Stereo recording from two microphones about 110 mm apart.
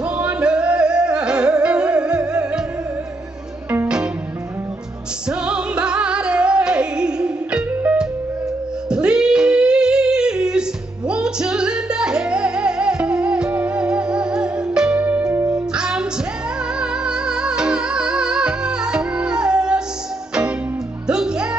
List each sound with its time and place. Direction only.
0.2 s music: 10° right (ahead or behind)
3.7 s music: 10° right (ahead or behind)
5.3 s music: 10° right (ahead or behind)
15.2 s music: 25° right (ahead or behind)
15.7 s music: 10° right (ahead or behind)
21.1 s music: 5° right (ahead or behind)